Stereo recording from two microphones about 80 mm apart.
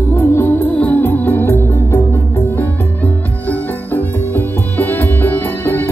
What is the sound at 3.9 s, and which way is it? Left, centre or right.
Music, left.